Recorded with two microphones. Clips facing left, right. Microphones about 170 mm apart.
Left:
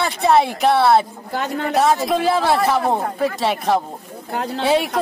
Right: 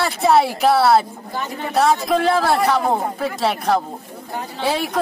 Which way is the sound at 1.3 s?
70° left (ahead or behind).